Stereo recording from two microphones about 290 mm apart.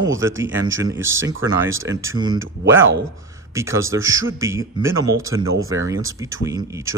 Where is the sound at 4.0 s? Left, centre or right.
Right.